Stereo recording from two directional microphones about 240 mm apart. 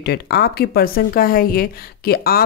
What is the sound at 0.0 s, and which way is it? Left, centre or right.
Speech, left.